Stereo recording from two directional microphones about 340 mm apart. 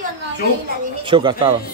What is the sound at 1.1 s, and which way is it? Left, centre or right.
Speech, centre.